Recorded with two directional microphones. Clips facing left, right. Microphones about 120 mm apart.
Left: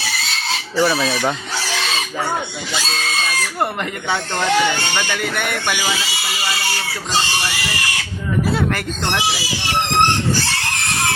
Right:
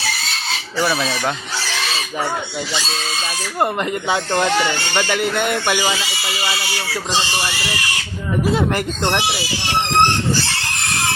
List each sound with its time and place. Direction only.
0.8 s chicken: centre (ahead or behind)
4.9 s speech: 20° right (ahead or behind)